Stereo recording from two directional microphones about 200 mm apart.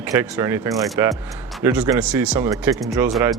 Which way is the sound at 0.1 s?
10° right (ahead or behind).